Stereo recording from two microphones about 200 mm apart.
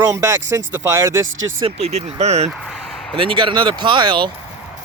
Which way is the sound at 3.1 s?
25° right (ahead or behind).